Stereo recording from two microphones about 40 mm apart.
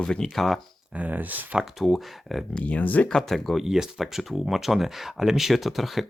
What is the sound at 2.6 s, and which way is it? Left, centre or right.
Speech, left.